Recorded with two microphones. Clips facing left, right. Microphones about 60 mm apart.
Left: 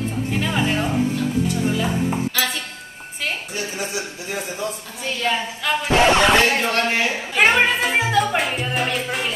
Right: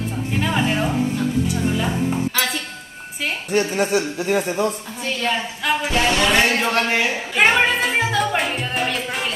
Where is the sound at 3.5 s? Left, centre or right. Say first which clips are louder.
Right 8 dB; right.